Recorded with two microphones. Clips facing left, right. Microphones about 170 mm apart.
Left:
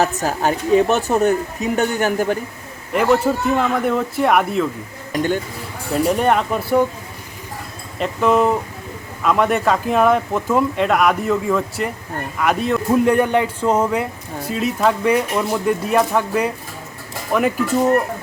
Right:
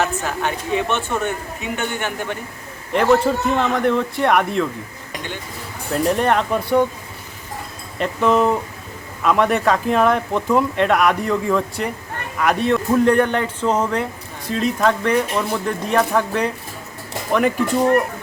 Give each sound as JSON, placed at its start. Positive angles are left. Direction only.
{"t": 0.0, "sound": "speech", "side_deg": 40}
{"t": 2.9, "sound": "speech", "side_deg": 5}
{"t": 5.9, "sound": "speech", "side_deg": 5}
{"t": 7.9, "sound": "speech", "side_deg": 0}